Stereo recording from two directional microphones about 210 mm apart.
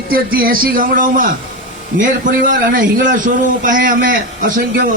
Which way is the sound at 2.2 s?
40° right (ahead or behind).